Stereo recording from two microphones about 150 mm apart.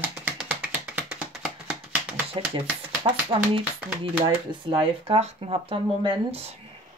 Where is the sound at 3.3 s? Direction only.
40° right (ahead or behind).